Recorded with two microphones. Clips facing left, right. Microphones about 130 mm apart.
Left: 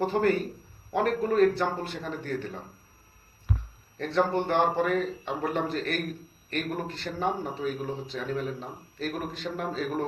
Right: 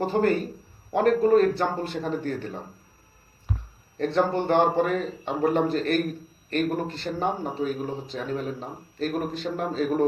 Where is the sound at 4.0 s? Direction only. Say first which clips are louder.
Right 2 dB; 30° right (ahead or behind).